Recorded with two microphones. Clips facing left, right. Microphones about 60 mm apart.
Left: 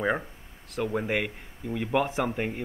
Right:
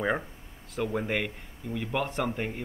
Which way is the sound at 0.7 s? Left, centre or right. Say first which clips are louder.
Left 2 dB; centre.